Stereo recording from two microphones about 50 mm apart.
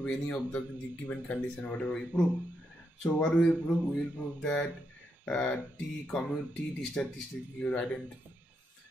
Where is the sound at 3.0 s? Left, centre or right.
Left.